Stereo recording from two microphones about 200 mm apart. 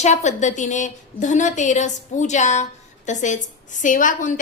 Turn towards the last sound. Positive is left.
turn(degrees=40)  # may be behind; listen again after turning